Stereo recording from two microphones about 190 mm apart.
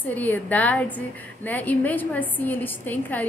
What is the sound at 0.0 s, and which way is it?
A woman's voice, 10° left (ahead or behind).